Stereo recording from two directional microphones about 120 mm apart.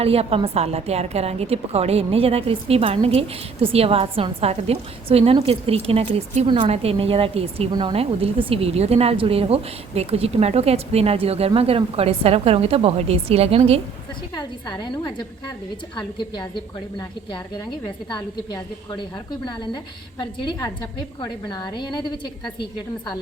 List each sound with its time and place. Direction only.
0.0 s a woman's voice: 55° right (ahead or behind)
7.7 s a woman's voice: 35° right (ahead or behind)
7.9 s a woman's voice: 50° right (ahead or behind)
14.3 s a woman's voice: 35° left (ahead or behind)
18.1 s a woman's voice: 35° left (ahead or behind)
21.2 s a woman's voice: 35° left (ahead or behind)